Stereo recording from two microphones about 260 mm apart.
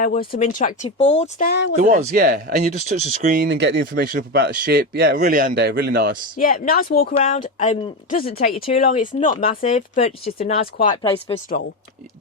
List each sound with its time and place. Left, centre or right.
0.0 s speech: left
1.5 s speech: left
1.8 s speech: right
6.3 s speech: left